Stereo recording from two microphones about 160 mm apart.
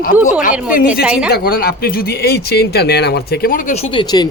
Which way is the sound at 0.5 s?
10° right (ahead or behind).